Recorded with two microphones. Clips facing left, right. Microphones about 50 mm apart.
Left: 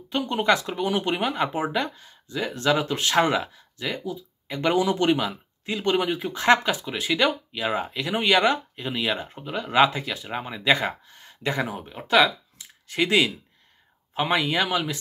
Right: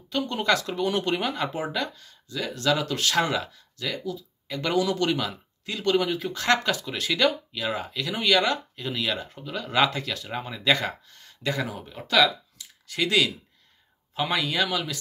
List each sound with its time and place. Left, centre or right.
0.1 s speech: left